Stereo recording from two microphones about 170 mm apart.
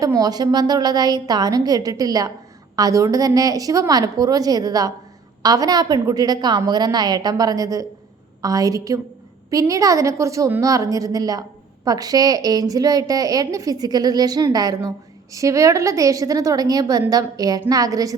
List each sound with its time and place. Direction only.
0.0 s a woman's voice: 20° right (ahead or behind)